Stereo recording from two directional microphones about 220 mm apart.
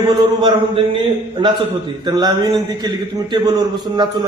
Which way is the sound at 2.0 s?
15° right (ahead or behind).